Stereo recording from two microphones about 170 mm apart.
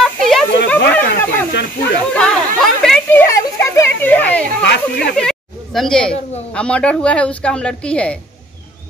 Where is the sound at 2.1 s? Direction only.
5° left (ahead or behind).